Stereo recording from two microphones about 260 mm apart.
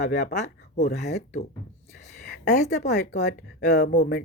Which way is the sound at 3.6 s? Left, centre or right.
Left.